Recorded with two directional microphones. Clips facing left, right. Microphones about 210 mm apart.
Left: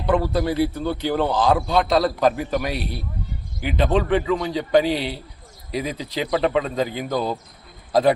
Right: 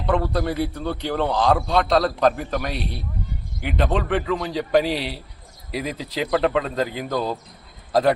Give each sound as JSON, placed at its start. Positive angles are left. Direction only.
{"t": 0.0, "sound": "a man's voice", "side_deg": 0}